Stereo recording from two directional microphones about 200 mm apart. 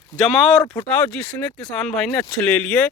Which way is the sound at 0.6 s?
10° left (ahead or behind).